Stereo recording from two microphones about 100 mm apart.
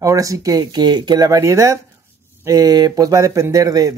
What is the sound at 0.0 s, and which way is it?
Speech, 35° right (ahead or behind).